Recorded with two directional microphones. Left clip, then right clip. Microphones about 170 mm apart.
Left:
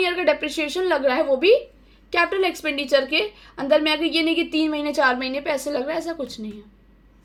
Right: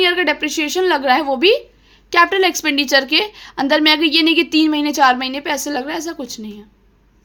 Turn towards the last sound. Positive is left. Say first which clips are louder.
# right 2 dB
turn(degrees=-45)  # may be behind; listen again after turning